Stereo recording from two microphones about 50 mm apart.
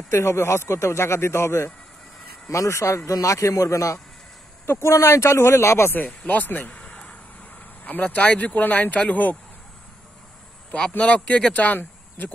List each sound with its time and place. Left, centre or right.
0.1 s speech: left
2.5 s a man's voice: left
4.6 s speech: left
4.9 s speech: left
5.9 s speech: left
6.7 s a sound: left
7.8 s speech: left
11.0 s speech: left
11.5 s speech: left